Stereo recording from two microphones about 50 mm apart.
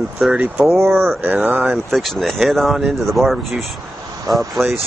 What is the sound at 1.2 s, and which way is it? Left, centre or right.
Speech, right.